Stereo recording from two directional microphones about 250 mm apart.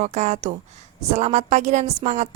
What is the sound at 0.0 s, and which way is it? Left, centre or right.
Speech, right.